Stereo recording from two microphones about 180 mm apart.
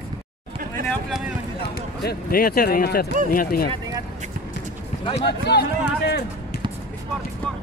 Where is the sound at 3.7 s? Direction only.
20° right (ahead or behind).